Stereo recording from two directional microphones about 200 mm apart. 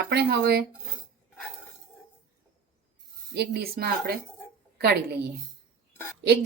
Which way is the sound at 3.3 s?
55° right (ahead or behind).